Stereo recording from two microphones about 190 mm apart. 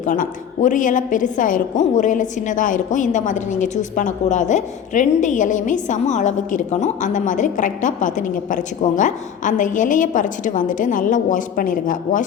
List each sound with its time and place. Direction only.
0.0 s a woman's voice: 45° left (ahead or behind)